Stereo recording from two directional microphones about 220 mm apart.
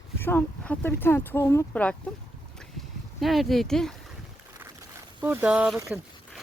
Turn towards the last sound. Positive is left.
turn(degrees=-5)  # may be behind; listen again after turning